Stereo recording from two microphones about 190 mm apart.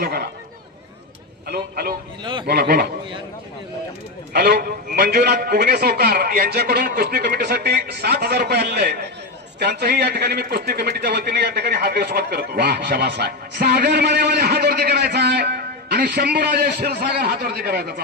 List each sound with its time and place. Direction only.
0.0 s a man's voice: 55° right (ahead or behind)
1.5 s a man's voice: 55° right (ahead or behind)
2.2 s a man's voice: 25° right (ahead or behind)
2.5 s a man's voice: 55° right (ahead or behind)
4.3 s a man's voice: 55° right (ahead or behind)